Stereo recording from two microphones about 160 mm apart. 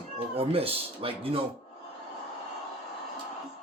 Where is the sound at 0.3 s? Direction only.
35° right (ahead or behind).